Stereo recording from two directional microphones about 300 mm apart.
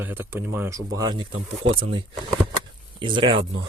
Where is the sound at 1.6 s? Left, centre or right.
Right.